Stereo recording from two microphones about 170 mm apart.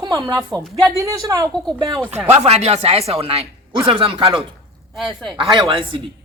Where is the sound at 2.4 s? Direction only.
40° right (ahead or behind).